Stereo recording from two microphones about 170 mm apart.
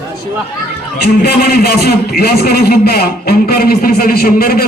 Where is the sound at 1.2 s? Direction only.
65° left (ahead or behind).